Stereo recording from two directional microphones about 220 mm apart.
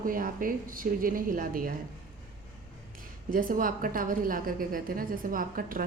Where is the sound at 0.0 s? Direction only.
40° right (ahead or behind).